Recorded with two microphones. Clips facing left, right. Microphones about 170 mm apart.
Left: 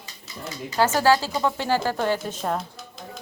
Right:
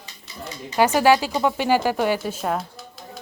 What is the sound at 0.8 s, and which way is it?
A woman's voice, 15° right (ahead or behind).